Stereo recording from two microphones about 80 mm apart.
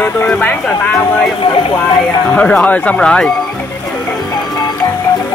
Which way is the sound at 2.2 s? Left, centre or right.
Centre.